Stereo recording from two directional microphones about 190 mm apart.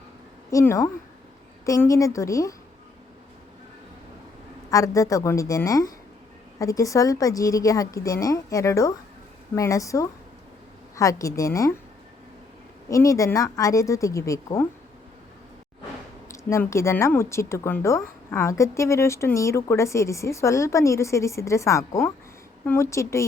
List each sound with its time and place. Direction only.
0.5 s a woman's voice: 15° left (ahead or behind)
4.7 s a woman's voice: 15° left (ahead or behind)
12.9 s a woman's voice: 15° left (ahead or behind)
16.3 s a woman's voice: 15° left (ahead or behind)